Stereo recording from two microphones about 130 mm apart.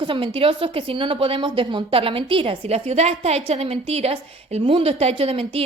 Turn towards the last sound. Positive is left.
turn(degrees=-50)  # may be behind; listen again after turning